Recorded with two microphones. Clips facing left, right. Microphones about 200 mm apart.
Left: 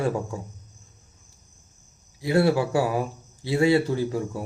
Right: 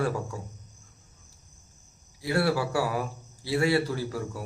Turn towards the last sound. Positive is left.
turn(degrees=20)  # may be behind; listen again after turning